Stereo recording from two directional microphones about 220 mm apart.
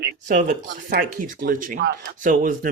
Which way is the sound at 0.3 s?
35° right (ahead or behind).